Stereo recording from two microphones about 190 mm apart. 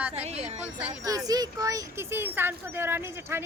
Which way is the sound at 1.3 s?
20° right (ahead or behind).